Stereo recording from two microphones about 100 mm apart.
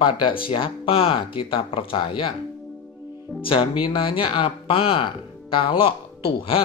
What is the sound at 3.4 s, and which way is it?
Speech, 65° left (ahead or behind).